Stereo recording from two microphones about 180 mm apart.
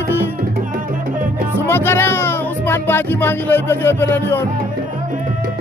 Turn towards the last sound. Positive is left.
turn(degrees=10)  # may be behind; listen again after turning